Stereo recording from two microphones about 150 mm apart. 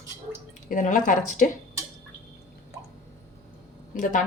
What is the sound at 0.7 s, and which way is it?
Speech, 60° left (ahead or behind).